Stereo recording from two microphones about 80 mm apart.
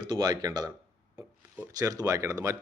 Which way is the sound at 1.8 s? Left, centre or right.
Right.